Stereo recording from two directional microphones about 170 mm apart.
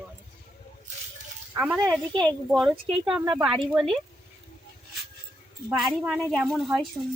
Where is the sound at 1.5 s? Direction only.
10° right (ahead or behind).